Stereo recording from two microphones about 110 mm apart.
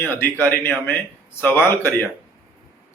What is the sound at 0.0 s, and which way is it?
Speech, 20° left (ahead or behind).